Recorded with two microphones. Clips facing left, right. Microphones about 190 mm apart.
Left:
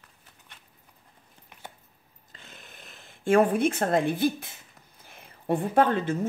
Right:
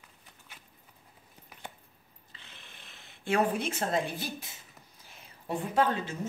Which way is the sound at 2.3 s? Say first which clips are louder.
Left 5 dB; 45° left (ahead or behind).